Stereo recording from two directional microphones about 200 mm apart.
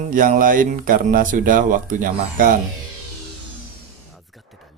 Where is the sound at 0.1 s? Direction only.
45° right (ahead or behind).